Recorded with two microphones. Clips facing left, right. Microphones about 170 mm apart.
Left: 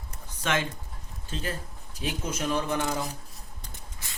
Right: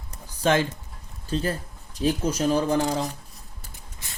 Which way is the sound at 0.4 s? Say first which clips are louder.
Right 7 dB; 35° right (ahead or behind).